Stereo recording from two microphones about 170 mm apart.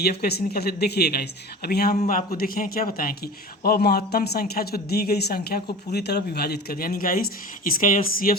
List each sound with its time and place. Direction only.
0.0 s speech: 65° left (ahead or behind)
2.0 s speech: 45° left (ahead or behind); by 5.6 s 65° left (ahead or behind)
5.9 s speech: 75° left (ahead or behind); by 8.4 s 55° left (ahead or behind)